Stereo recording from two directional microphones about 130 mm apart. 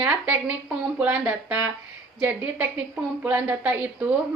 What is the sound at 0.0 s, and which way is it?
A woman's voice, 10° right (ahead or behind).